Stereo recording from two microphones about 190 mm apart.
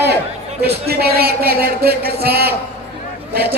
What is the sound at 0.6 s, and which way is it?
A man's voice, 55° right (ahead or behind).